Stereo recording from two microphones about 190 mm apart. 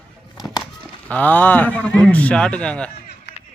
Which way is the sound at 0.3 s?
20° left (ahead or behind).